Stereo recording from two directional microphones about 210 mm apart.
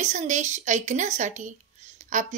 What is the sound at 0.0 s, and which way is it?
Speech, 35° right (ahead or behind).